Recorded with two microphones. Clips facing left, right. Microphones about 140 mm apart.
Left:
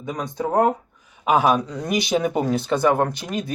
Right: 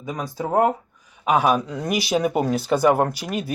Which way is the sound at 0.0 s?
Centre (ahead or behind).